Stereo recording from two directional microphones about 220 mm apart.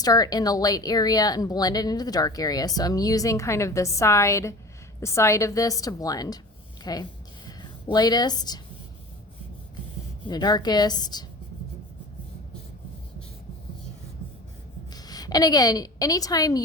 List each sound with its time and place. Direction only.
0.0 s speech: 15° left (ahead or behind)
6.8 s a sound: 20° left (ahead or behind)
10.2 s speech: 20° left (ahead or behind)
14.8 s a woman's voice: 15° left (ahead or behind)